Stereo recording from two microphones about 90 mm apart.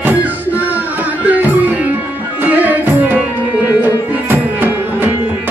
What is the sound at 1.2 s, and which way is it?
Music, 20° right (ahead or behind).